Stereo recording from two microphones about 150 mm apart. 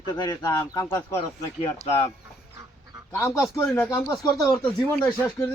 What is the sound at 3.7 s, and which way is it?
Speech, 15° left (ahead or behind).